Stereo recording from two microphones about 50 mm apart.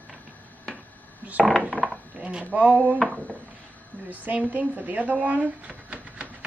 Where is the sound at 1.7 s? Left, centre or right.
Left.